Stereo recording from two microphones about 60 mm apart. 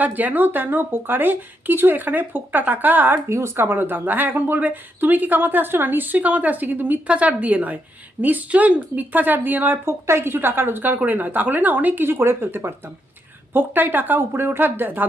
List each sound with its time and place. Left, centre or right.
0.0 s speech: right
3.2 s a woman's voice: right
12.1 s speech: right